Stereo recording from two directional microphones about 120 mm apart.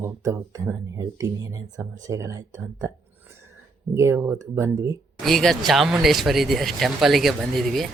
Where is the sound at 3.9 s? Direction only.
20° right (ahead or behind).